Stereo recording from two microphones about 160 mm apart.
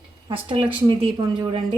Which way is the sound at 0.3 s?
35° right (ahead or behind).